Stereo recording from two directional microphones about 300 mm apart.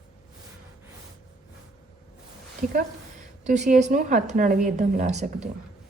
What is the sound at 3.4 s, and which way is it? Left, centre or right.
A woman's voice, right.